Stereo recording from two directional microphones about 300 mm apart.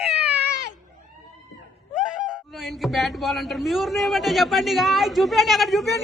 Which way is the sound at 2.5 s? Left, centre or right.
Centre.